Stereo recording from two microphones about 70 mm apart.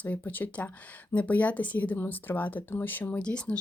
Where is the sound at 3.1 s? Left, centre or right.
Centre.